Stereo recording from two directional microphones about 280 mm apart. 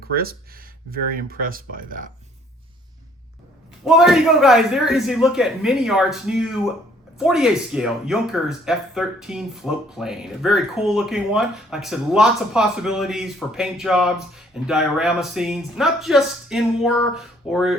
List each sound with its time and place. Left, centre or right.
0.1 s speech: right
3.8 s speech: centre